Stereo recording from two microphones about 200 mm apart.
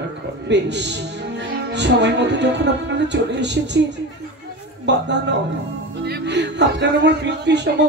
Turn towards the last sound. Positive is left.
turn(degrees=-60)  # may be behind; listen again after turning